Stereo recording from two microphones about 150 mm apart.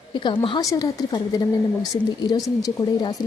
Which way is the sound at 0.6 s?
25° left (ahead or behind).